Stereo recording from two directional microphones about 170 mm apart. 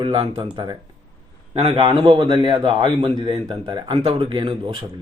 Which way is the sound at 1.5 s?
30° right (ahead or behind).